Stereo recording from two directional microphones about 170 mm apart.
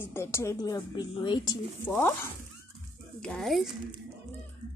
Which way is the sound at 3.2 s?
5° left (ahead or behind).